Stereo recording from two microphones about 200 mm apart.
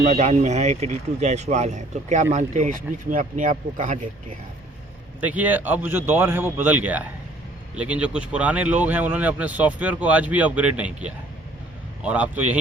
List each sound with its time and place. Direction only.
0.0 s speech: 35° right (ahead or behind)
5.2 s speech: 10° right (ahead or behind)